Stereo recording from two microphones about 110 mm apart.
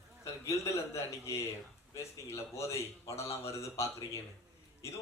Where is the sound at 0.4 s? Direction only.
25° left (ahead or behind).